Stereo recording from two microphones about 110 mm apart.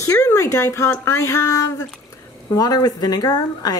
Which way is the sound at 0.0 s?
30° left (ahead or behind).